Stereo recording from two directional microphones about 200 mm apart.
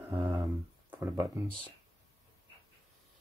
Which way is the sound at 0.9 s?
15° right (ahead or behind).